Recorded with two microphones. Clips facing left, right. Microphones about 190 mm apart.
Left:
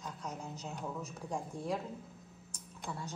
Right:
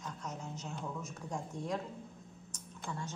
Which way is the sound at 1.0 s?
35° left (ahead or behind).